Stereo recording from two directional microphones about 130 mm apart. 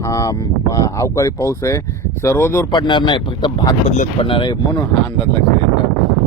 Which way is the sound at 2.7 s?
35° left (ahead or behind).